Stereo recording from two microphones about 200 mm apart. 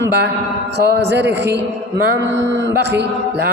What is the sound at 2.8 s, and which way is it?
Speech, 55° right (ahead or behind).